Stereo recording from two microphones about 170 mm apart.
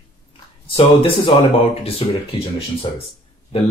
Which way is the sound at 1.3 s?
35° left (ahead or behind).